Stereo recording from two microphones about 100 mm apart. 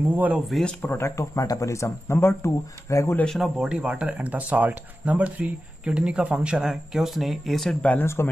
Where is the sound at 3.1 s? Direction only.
5° left (ahead or behind).